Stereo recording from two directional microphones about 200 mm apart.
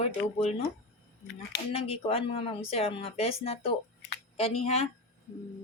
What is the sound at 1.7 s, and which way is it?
A woman's voice, 30° left (ahead or behind).